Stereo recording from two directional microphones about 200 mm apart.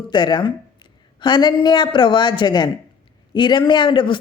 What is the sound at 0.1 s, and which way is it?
A woman's voice, 20° left (ahead or behind).